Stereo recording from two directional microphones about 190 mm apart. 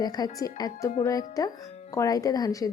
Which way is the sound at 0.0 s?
20° left (ahead or behind).